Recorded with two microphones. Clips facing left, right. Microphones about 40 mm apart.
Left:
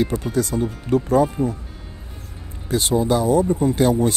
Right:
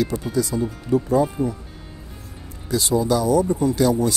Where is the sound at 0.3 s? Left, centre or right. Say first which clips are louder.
Left 1 dB; left.